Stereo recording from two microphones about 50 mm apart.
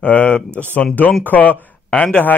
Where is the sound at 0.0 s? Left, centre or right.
Left.